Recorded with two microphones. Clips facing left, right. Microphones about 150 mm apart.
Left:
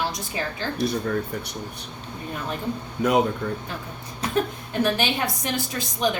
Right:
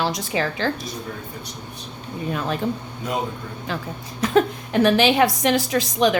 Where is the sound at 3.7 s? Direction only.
90° right.